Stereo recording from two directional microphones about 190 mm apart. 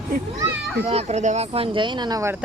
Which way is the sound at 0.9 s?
35° right (ahead or behind).